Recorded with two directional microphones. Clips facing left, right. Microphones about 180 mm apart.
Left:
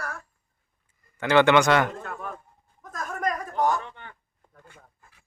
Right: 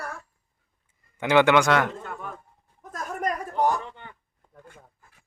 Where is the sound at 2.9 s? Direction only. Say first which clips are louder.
Even; 30° right (ahead or behind).